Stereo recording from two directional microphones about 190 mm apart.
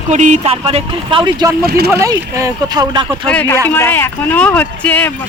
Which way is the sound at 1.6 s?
55° right (ahead or behind).